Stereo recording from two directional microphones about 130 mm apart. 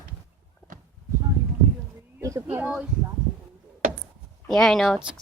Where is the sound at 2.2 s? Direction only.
25° right (ahead or behind).